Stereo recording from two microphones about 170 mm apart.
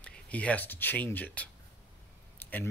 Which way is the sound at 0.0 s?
10° left (ahead or behind).